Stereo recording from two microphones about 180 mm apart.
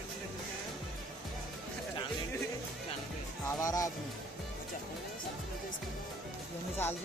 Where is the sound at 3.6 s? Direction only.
20° left (ahead or behind).